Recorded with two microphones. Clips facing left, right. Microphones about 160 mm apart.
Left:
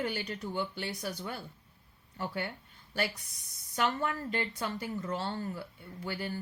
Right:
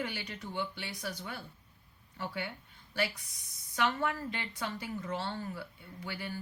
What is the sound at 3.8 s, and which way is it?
Speech, 45° left (ahead or behind).